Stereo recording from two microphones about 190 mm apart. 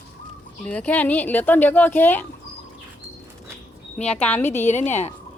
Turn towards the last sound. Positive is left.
turn(degrees=35)  # may be behind; listen again after turning